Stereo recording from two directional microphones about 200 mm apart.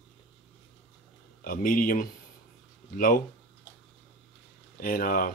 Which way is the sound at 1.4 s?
45° left (ahead or behind).